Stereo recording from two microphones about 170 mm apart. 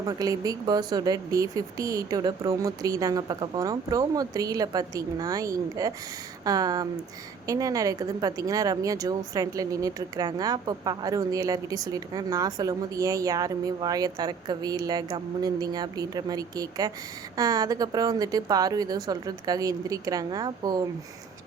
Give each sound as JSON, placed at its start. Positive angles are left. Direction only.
{"t": 0.0, "sound": "speech", "side_deg": -20}